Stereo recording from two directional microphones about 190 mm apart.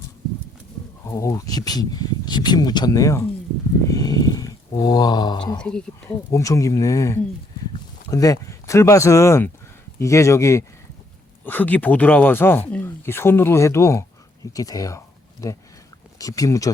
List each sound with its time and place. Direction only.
1.0 s speech: 15° left (ahead or behind)
5.5 s speech: 5° left (ahead or behind)
6.3 s speech: 15° left (ahead or behind)